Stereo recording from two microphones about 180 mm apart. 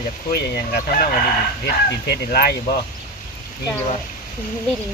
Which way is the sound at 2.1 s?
60° left (ahead or behind).